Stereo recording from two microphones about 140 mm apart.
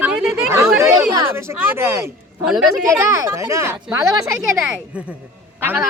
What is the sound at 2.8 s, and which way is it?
Speech, 20° right (ahead or behind).